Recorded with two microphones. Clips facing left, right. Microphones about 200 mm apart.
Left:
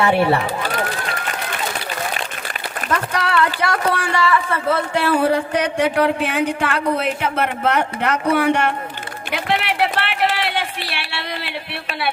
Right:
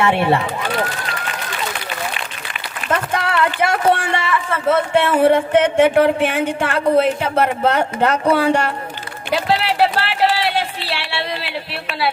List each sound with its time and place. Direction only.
0.0 s speech: 25° right (ahead or behind)
2.9 s speech: 25° right (ahead or behind)
9.3 s a sound: 30° right (ahead or behind)